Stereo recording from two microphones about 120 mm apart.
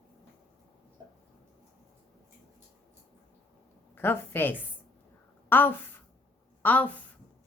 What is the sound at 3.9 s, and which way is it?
A woman's voice, 15° left (ahead or behind).